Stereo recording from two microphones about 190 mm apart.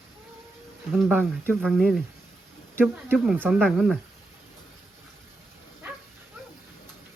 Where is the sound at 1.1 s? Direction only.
10° right (ahead or behind).